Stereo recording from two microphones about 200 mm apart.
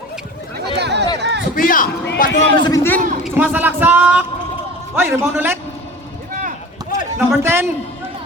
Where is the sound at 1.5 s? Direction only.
45° left (ahead or behind).